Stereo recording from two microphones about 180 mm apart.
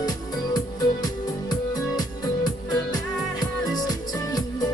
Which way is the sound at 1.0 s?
20° left (ahead or behind).